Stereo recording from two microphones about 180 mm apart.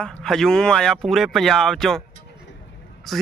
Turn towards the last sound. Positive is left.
turn(degrees=0)  # may be behind; listen again after turning